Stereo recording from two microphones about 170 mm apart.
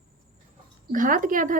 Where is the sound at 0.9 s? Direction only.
50° right (ahead or behind).